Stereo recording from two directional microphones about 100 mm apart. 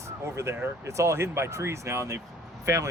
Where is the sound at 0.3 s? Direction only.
25° right (ahead or behind).